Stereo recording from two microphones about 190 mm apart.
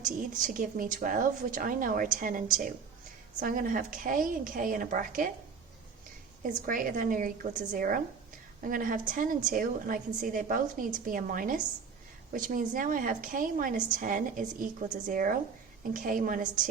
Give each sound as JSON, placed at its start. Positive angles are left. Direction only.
{"t": 0.0, "sound": "a woman's voice", "side_deg": -45}
{"t": 6.7, "sound": "a woman's voice", "side_deg": -45}